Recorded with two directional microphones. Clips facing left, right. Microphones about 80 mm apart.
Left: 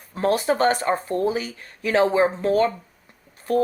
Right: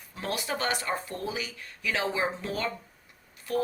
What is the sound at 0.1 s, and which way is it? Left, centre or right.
A woman's voice, left.